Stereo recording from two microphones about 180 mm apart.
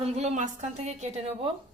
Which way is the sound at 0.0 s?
40° right (ahead or behind).